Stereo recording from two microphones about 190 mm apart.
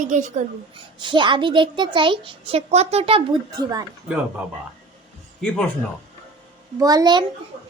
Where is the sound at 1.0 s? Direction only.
25° right (ahead or behind).